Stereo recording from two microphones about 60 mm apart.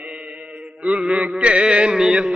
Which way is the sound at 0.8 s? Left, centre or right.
Centre.